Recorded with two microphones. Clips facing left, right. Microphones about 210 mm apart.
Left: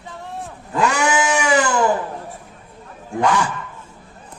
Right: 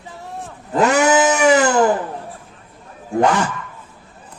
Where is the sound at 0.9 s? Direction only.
40° right (ahead or behind).